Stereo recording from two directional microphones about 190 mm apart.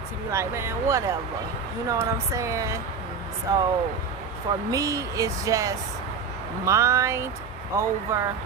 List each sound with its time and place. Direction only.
0.3 s speech: 15° right (ahead or behind)
4.7 s speech: 15° right (ahead or behind)